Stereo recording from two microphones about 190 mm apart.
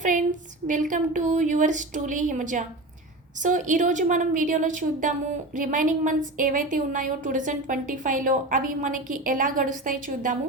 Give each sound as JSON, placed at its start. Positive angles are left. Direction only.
{"t": 0.0, "sound": "a woman's voice", "side_deg": -40}